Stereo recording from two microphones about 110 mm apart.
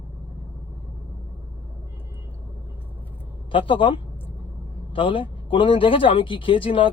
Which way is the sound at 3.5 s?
50° left (ahead or behind).